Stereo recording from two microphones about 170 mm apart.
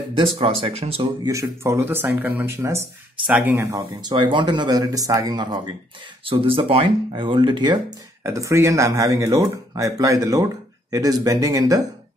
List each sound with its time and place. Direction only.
0.4 s speech: 30° right (ahead or behind)
1.2 s speech: 20° right (ahead or behind)
8.2 s speech: 15° right (ahead or behind)